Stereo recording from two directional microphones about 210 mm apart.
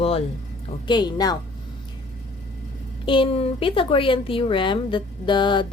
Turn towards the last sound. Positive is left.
turn(degrees=20)  # may be behind; listen again after turning